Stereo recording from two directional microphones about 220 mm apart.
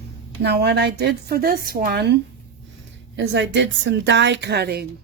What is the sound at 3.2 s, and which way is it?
A woman's voice, 55° right (ahead or behind).